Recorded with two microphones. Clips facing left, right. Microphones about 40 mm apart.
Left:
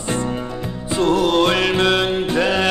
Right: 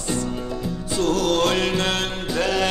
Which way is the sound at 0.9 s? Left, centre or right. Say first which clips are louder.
Left 5 dB; left.